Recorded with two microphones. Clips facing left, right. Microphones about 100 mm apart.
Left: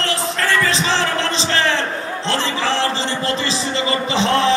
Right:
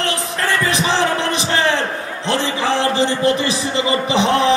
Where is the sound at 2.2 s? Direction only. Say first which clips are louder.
Right 2 dB; 15° right (ahead or behind).